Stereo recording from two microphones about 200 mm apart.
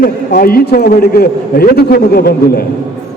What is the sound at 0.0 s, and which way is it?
A man's voice, 50° left (ahead or behind).